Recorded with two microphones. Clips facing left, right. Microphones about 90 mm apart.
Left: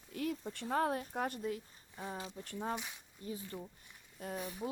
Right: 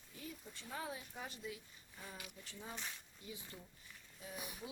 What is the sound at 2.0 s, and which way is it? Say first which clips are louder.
Speech: left 10 dB; 30° left (ahead or behind).